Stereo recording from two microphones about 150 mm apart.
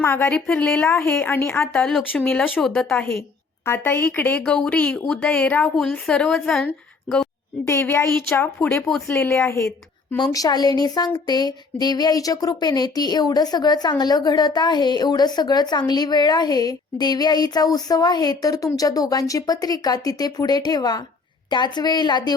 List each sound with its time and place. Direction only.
0.0 s a woman's voice: 15° left (ahead or behind)
7.7 s a woman's voice: 20° left (ahead or behind)
8.6 s speech: 5° left (ahead or behind)
9.0 s a woman's voice: 15° left (ahead or behind)